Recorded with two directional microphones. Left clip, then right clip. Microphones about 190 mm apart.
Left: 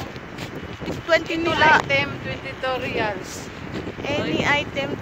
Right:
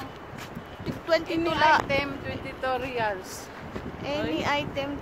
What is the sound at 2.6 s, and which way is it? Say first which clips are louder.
Speech: left 3 dB; 45° right (ahead or behind).